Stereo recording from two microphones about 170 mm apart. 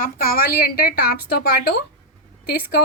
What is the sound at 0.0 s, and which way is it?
A woman's voice, 60° left (ahead or behind).